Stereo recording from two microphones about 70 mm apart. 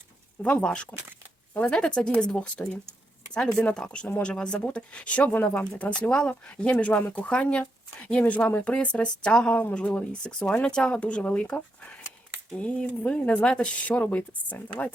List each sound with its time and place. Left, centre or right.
0.6 s speech: centre